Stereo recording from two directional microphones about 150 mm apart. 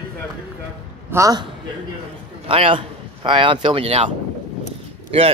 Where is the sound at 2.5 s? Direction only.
35° right (ahead or behind).